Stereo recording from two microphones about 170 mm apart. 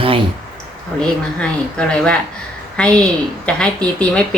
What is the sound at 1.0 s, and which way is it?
A woman's voice, 5° left (ahead or behind).